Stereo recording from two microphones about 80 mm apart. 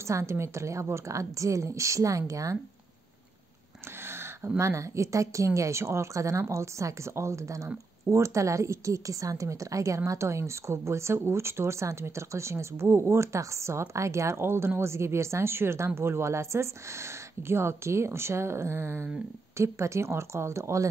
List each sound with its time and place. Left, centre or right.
0.0 s speech: right
4.0 s a sound: right
4.6 s speech: right